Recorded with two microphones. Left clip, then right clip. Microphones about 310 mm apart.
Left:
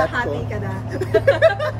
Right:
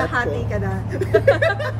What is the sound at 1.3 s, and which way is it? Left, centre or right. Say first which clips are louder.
Speech: even; centre.